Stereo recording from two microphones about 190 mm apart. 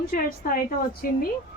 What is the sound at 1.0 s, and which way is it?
Speech, 50° left (ahead or behind).